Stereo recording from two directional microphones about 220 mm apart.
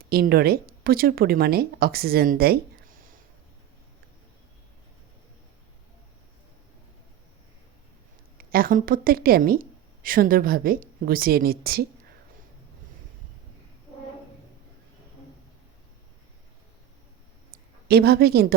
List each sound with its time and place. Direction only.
0.0 s speech: 45° right (ahead or behind)
8.4 s a woman's voice: 40° right (ahead or behind)
17.8 s speech: 45° right (ahead or behind)